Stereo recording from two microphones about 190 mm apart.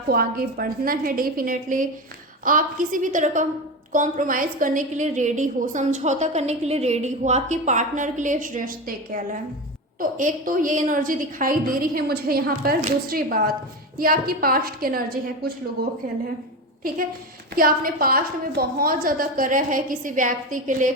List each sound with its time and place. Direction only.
0.1 s a woman's voice: 50° right (ahead or behind)
17.5 s a woman's voice: 50° right (ahead or behind)